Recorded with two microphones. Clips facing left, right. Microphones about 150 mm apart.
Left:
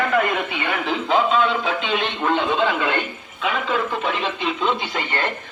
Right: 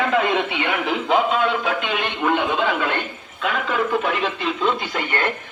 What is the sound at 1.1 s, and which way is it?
Speech, 10° right (ahead or behind).